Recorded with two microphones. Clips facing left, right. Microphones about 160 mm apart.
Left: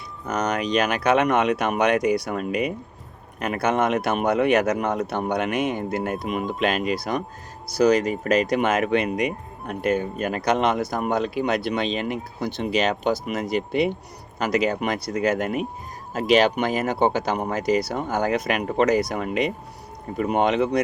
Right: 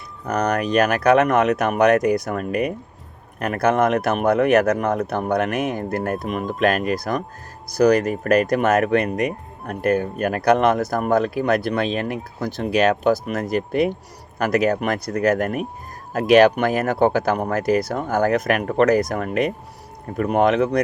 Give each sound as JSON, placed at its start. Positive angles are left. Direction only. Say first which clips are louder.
{"t": 0.3, "sound": "speech", "louder": "right 3 dB", "side_deg": -55}